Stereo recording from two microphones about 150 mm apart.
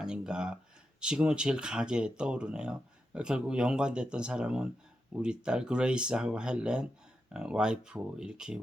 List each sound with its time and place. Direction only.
0.0 s speech: 5° right (ahead or behind)